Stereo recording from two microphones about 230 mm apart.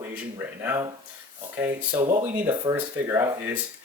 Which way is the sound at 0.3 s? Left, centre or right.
Centre.